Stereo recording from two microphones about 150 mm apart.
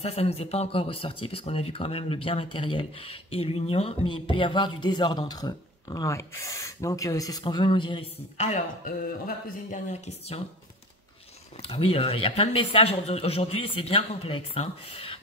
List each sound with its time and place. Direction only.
0.0 s speech: 45° left (ahead or behind)
8.4 s speech: 50° left (ahead or behind)
8.8 s speech: 70° left (ahead or behind); by 10.4 s 45° left (ahead or behind)
11.6 s speech: 40° left (ahead or behind)